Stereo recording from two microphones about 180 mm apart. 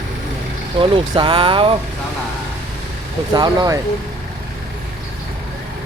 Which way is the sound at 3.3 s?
20° right (ahead or behind).